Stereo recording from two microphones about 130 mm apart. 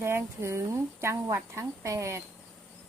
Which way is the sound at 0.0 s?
20° right (ahead or behind).